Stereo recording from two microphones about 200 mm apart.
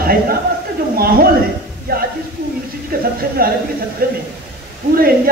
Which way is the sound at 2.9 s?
45° right (ahead or behind).